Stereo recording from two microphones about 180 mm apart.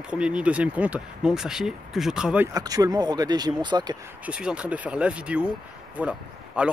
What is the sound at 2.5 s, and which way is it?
Speech, 20° right (ahead or behind).